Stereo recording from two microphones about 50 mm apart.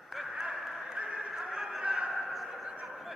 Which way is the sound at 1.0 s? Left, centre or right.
Right.